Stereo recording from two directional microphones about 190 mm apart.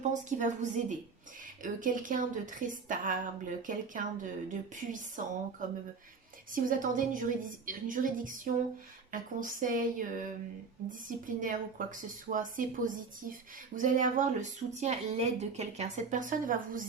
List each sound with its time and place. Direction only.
0.0 s speech: 40° right (ahead or behind)